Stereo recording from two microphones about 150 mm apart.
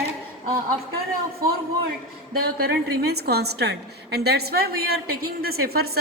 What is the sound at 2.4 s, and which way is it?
A woman's voice, 90° right.